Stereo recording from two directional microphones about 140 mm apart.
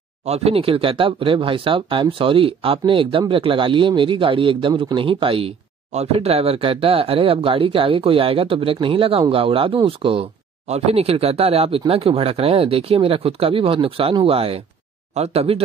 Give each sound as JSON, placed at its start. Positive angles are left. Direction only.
{"t": 0.2, "sound": "speech", "side_deg": -50}